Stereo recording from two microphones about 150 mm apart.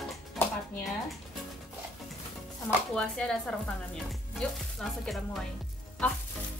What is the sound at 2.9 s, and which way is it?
Speech, 5° left (ahead or behind).